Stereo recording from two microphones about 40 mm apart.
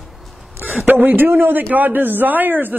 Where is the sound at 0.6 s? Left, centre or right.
Right.